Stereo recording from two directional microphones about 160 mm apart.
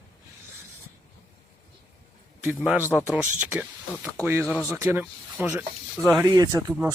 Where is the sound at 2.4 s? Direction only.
10° right (ahead or behind).